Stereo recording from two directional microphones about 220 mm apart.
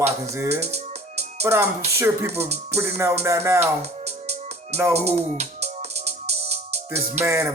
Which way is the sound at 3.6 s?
30° right (ahead or behind).